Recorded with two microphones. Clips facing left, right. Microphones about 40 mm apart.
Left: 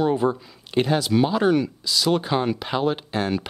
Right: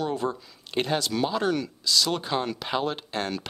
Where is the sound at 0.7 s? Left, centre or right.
Centre.